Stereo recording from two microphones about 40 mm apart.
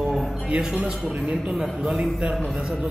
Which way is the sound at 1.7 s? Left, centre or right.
Centre.